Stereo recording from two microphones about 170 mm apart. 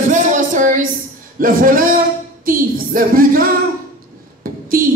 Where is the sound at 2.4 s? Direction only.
55° right (ahead or behind).